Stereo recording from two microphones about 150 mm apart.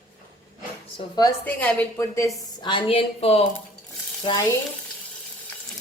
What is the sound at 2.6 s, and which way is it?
Speech, 35° left (ahead or behind).